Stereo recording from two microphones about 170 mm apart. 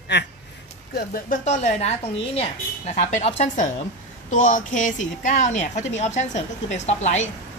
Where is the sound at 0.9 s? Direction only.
60° left (ahead or behind).